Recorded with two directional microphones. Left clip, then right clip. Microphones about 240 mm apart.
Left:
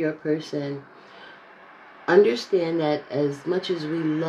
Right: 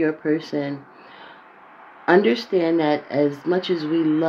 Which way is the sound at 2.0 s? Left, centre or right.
Right.